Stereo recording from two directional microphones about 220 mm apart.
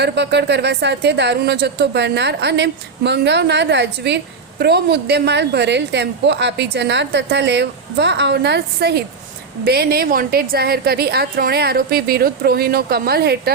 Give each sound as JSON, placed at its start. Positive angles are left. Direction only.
{"t": 0.0, "sound": "a woman's voice", "side_deg": -50}